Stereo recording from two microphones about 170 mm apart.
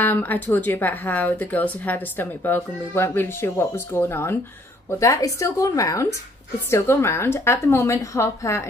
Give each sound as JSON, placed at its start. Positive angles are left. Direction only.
{"t": 0.0, "sound": "a woman's voice", "side_deg": 10}